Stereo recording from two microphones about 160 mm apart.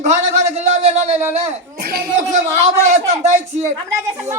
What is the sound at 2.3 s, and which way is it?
Speech, 45° right (ahead or behind).